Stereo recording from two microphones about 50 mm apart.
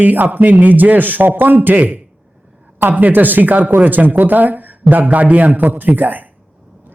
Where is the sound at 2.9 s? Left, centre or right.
Right.